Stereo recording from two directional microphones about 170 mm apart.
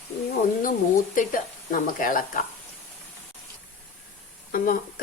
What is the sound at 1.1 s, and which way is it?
Speech, 50° left (ahead or behind).